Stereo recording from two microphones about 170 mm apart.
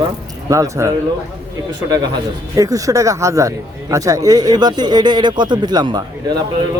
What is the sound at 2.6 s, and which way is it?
Speech, 20° right (ahead or behind).